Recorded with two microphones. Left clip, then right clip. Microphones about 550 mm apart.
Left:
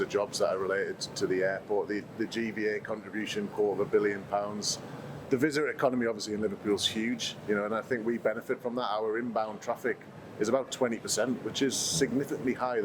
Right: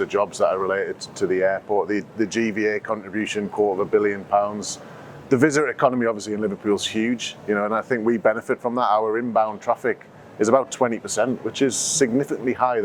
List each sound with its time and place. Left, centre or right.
0.0 s speech: right
5.3 s speech: right